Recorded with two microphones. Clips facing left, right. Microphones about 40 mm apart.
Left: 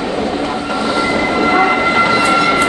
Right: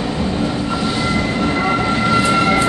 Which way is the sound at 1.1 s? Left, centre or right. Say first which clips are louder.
Left 5 dB; left.